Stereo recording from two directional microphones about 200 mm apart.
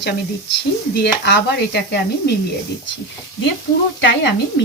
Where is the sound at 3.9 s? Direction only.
60° left (ahead or behind).